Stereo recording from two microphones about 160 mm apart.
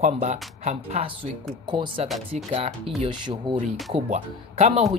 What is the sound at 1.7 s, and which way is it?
Speech, 30° right (ahead or behind).